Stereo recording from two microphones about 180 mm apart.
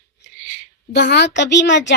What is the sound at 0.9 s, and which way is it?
Speech, 70° left (ahead or behind).